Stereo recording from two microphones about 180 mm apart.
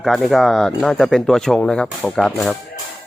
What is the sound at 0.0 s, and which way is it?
Speech, centre (ahead or behind).